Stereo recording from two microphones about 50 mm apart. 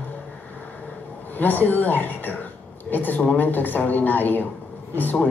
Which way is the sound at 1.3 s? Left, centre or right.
Left.